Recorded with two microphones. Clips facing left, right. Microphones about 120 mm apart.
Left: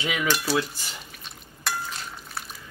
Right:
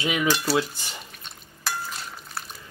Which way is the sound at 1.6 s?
Centre (ahead or behind).